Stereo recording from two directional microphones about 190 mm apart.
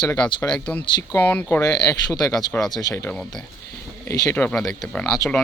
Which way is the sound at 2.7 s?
20° left (ahead or behind).